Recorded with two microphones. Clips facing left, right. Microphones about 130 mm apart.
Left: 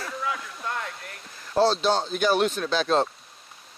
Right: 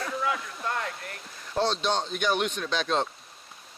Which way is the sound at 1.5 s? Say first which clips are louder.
Left 5 dB; 35° left (ahead or behind).